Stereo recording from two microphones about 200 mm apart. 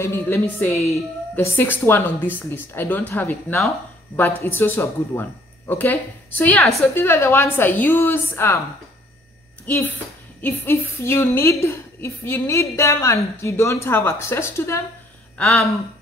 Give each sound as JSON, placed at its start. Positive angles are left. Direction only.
{"t": 0.0, "sound": "a woman's voice", "side_deg": 10}
{"t": 10.4, "sound": "a woman's voice", "side_deg": 10}